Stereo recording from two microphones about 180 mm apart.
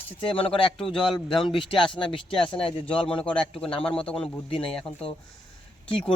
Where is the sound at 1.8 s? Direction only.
25° left (ahead or behind).